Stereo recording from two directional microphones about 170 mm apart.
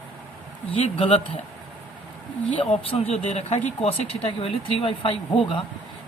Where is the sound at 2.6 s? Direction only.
35° left (ahead or behind).